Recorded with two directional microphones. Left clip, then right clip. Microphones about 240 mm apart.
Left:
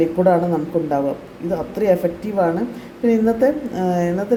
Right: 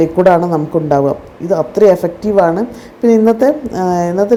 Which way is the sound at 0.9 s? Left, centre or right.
Right.